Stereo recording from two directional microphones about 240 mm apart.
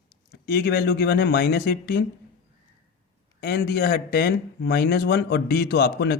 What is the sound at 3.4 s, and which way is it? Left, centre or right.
Speech, left.